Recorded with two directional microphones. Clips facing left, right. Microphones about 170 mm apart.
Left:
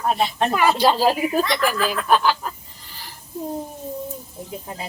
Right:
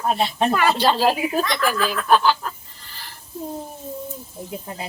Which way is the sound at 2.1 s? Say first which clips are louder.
Right 2 dB; centre (ahead or behind).